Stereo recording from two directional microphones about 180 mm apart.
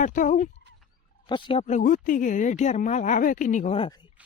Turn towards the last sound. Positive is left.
turn(degrees=25)  # may be behind; listen again after turning